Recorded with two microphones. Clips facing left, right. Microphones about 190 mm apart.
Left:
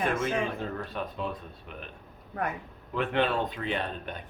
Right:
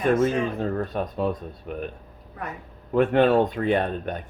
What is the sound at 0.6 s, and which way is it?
Speech, 45° right (ahead or behind).